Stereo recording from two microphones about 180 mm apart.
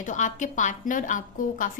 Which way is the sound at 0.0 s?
45° left (ahead or behind).